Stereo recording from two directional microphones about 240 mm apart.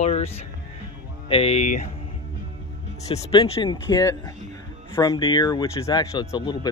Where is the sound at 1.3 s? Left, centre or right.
Left.